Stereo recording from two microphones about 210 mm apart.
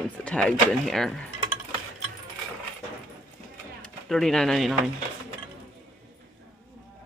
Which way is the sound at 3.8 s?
Centre (ahead or behind).